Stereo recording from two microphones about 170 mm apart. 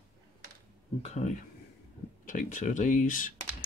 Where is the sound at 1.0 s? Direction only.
45° left (ahead or behind).